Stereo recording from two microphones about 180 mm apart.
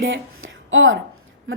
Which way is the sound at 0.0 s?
90° right.